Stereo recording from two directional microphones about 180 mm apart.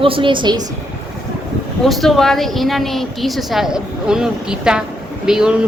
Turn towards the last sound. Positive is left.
turn(degrees=-5)  # may be behind; listen again after turning